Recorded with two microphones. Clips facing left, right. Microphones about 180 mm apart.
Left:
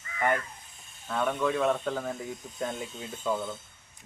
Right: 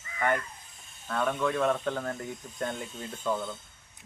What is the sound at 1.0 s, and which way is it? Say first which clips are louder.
Speech: left 1 dB; 5° left (ahead or behind).